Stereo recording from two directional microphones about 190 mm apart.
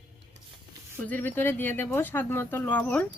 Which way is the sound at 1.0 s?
10° left (ahead or behind).